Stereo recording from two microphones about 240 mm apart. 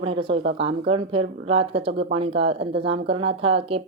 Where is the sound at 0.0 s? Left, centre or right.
Right.